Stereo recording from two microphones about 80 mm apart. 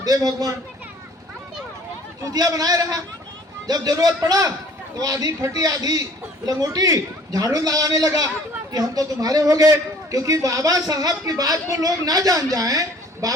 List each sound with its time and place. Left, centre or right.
0.0 s a man's voice: right
2.2 s a man's voice: right